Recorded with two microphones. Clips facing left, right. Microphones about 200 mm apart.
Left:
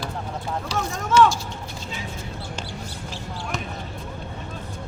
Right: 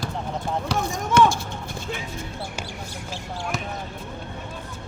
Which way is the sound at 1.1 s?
55° right (ahead or behind).